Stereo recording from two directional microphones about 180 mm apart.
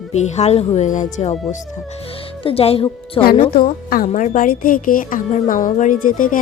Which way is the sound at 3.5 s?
55° left (ahead or behind).